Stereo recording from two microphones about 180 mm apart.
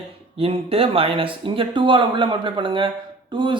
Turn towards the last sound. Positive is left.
turn(degrees=-25)  # may be behind; listen again after turning